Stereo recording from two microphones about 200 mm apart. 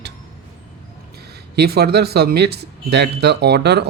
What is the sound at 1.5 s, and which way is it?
Speech, 55° right (ahead or behind).